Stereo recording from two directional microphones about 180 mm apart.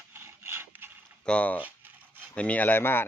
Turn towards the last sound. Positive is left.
turn(degrees=10)  # may be behind; listen again after turning